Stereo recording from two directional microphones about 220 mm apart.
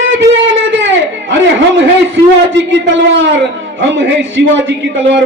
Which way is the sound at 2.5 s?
55° right (ahead or behind).